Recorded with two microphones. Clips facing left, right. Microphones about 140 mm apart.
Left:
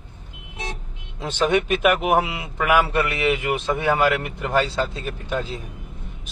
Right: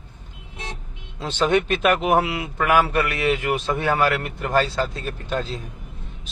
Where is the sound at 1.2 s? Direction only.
15° left (ahead or behind).